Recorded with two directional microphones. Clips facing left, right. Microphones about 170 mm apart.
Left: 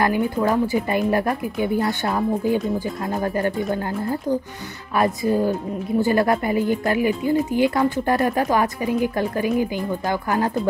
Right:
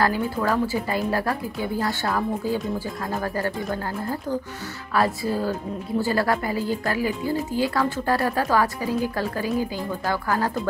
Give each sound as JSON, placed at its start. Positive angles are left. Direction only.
{"t": 0.0, "sound": "a woman's voice", "side_deg": 20}
{"t": 4.9, "sound": "a woman's voice", "side_deg": 20}